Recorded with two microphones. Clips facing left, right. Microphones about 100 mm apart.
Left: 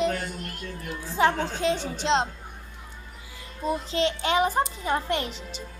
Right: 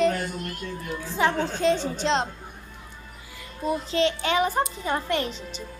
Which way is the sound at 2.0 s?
20° left (ahead or behind).